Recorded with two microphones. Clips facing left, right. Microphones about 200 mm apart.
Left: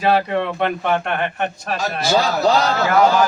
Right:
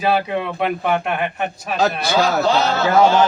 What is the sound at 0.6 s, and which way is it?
Speech, 5° right (ahead or behind).